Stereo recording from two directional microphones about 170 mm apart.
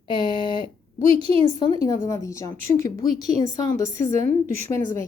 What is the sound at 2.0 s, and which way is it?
A woman's voice, 20° left (ahead or behind).